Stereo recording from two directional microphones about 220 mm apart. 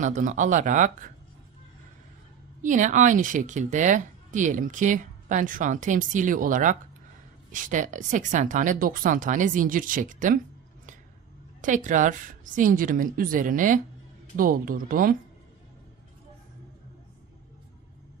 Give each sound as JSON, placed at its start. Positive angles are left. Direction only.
{"t": 0.0, "sound": "speech", "side_deg": -35}
{"t": 2.6, "sound": "speech", "side_deg": -35}
{"t": 11.6, "sound": "speech", "side_deg": -35}